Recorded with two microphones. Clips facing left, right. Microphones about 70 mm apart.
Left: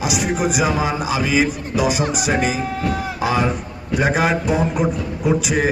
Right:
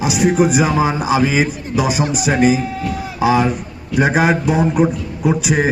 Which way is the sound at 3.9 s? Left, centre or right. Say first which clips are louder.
Right 3 dB; centre.